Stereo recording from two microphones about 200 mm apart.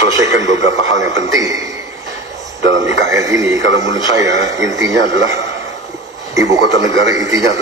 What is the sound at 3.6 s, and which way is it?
Speech, 65° right (ahead or behind).